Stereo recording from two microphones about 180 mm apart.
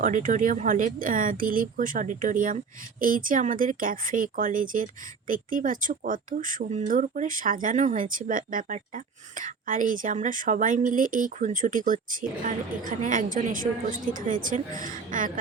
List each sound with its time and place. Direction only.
0.0 s a woman's voice: 45° right (ahead or behind)